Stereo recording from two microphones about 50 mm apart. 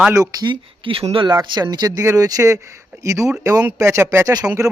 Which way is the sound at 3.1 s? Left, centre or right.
Right.